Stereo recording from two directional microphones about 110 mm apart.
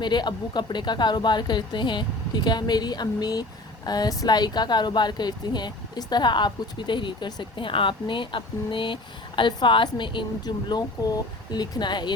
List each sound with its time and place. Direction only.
0.0 s speech: 40° left (ahead or behind)